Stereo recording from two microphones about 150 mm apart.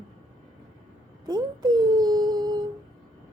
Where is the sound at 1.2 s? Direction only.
25° right (ahead or behind).